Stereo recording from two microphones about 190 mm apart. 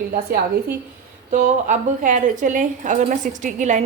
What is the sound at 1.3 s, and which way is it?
A woman's voice, 40° right (ahead or behind).